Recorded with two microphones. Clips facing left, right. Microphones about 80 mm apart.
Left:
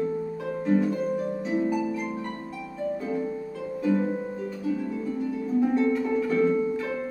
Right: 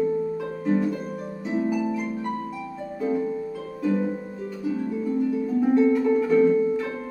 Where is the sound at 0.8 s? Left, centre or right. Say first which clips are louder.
Left 2 dB; centre.